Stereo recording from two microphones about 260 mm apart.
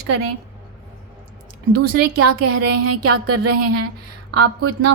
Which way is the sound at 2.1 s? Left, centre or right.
Right.